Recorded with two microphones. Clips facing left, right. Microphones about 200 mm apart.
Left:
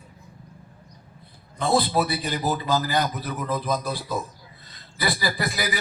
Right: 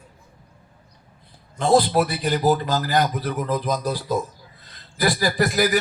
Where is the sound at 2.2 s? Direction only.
45° right (ahead or behind).